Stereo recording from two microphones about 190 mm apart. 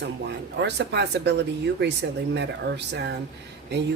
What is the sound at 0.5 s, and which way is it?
Speech, 65° right (ahead or behind).